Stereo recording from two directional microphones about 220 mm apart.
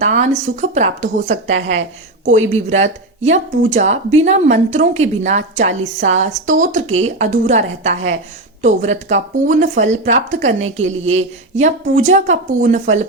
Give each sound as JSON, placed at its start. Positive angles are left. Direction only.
{"t": 0.0, "sound": "speech", "side_deg": -30}
{"t": 1.5, "sound": "a woman's voice", "side_deg": -60}
{"t": 2.5, "sound": "speech", "side_deg": -30}
{"t": 10.8, "sound": "a woman's voice", "side_deg": -65}
{"t": 11.2, "sound": "speech", "side_deg": -30}